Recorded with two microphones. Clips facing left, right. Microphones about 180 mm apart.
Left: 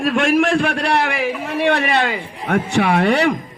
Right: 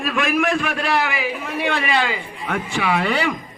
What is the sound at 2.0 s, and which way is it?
A man's voice, 45° left (ahead or behind).